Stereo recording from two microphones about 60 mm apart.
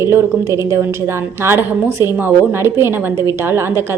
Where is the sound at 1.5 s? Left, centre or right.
Right.